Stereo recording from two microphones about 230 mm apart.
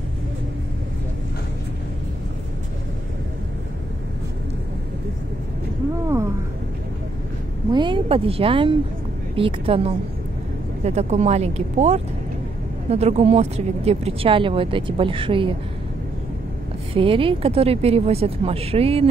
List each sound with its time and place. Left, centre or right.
6.0 s a sound: centre
7.7 s speech: right
16.9 s speech: right